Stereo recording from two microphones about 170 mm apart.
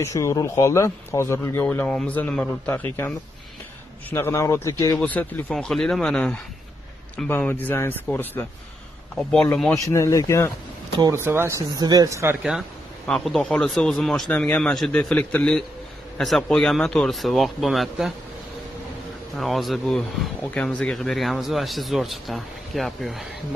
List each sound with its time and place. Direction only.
0.0 s speech: 15° left (ahead or behind)
5.0 s speech: 10° left (ahead or behind)
9.8 s speech: 20° left (ahead or behind)
11.0 s speech: 15° right (ahead or behind)
12.4 s speech: centre (ahead or behind)
19.3 s speech: centre (ahead or behind)